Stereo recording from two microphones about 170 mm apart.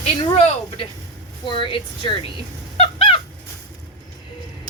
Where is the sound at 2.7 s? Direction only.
35° left (ahead or behind).